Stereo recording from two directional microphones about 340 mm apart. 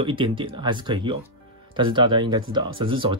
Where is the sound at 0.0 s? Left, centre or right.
Centre.